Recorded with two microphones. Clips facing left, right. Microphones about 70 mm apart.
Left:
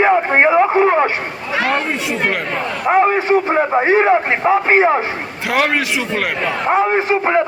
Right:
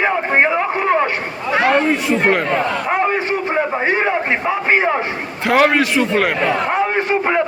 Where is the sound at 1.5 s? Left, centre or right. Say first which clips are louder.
Right 3 dB; centre.